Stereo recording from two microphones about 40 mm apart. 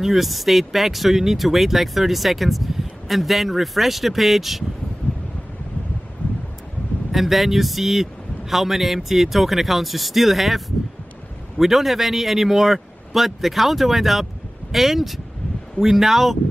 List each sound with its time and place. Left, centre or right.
0.0 s speech: centre
6.2 s a sound: left
7.1 s speech: centre